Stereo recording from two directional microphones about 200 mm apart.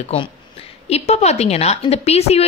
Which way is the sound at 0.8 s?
30° left (ahead or behind).